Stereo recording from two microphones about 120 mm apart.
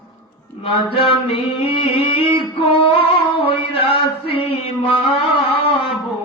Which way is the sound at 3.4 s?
50° left (ahead or behind).